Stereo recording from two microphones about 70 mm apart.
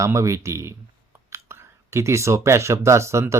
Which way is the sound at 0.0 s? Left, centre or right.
Right.